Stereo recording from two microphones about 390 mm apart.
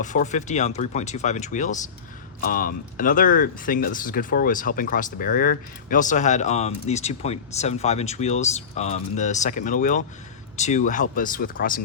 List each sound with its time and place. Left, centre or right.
0.0 s speech: centre